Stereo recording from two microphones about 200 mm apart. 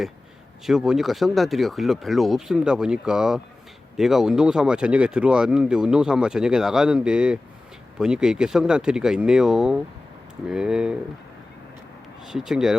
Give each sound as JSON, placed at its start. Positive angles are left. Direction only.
{"t": 0.6, "sound": "speech", "side_deg": 0}
{"t": 12.5, "sound": "speech", "side_deg": 0}